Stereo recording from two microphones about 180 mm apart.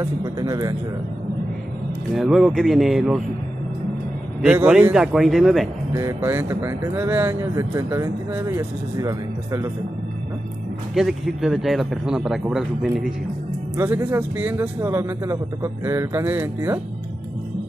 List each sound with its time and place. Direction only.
0.0 s speech: 20° right (ahead or behind)
2.1 s speech: centre (ahead or behind)
4.4 s speech: 5° right (ahead or behind)
5.9 s speech: 15° right (ahead or behind)
11.0 s speech: centre (ahead or behind)